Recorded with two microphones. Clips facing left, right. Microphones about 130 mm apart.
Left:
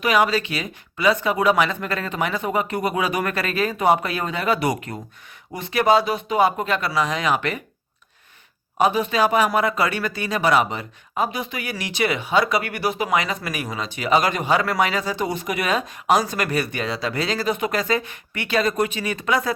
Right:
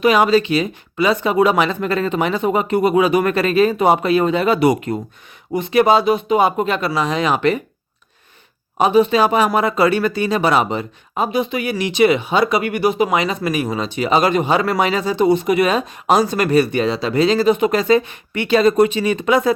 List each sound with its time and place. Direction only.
0.0 s speech: 25° right (ahead or behind)
8.8 s speech: 25° right (ahead or behind)